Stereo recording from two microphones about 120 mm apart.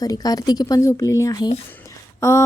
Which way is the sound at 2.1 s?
20° left (ahead or behind).